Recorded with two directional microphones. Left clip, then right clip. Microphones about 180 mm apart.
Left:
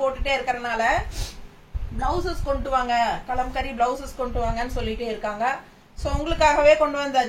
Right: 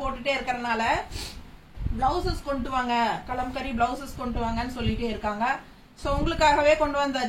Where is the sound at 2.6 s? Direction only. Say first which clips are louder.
Left 3 dB; 15° left (ahead or behind).